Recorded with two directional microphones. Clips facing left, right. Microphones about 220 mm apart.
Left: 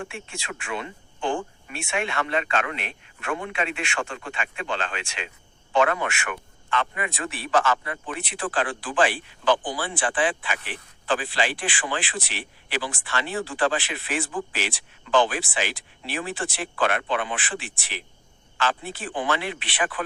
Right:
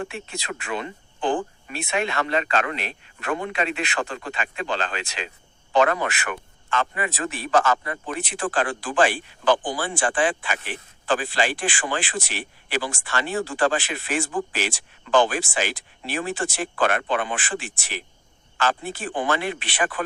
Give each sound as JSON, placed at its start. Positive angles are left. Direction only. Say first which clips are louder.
{"t": 0.0, "sound": "speech", "louder": "right 3 dB", "side_deg": -35}